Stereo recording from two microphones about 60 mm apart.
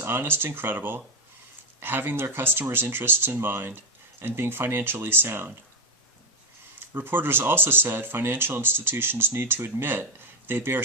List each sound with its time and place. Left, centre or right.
0.0 s speech: right
6.7 s speech: right